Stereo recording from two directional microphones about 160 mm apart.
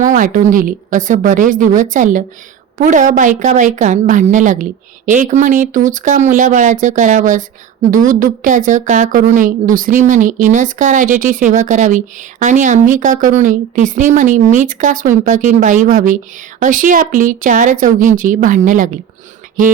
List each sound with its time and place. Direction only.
0.1 s a woman's voice: 55° right (ahead or behind)